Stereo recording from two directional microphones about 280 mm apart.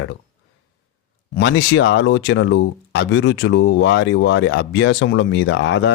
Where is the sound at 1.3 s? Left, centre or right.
Left.